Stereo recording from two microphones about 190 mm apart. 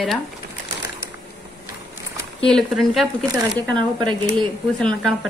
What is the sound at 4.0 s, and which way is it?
Speech, 25° right (ahead or behind).